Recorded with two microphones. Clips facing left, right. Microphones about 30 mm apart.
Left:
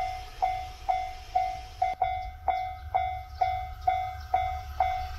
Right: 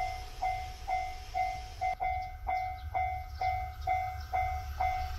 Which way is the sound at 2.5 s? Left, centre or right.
Left.